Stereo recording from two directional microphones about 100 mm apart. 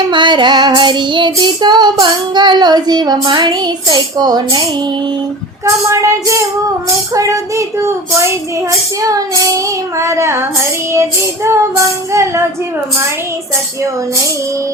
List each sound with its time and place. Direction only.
0.1 s child singing: 50° right (ahead or behind)
5.6 s speech: 30° right (ahead or behind)
10.0 s child singing: 30° right (ahead or behind)
10.9 s speech: 30° right (ahead or behind)
12.1 s child singing: 30° right (ahead or behind)